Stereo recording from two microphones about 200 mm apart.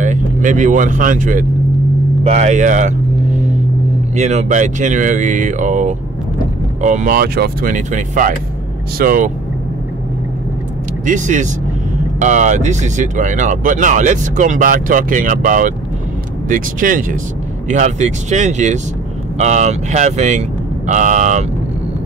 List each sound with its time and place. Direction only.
0.0 s speech: 40° right (ahead or behind)
4.1 s speech: 35° right (ahead or behind)
11.1 s speech: 40° right (ahead or behind)